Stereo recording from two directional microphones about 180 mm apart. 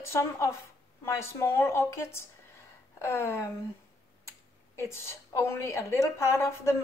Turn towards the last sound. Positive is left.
turn(degrees=15)  # may be behind; listen again after turning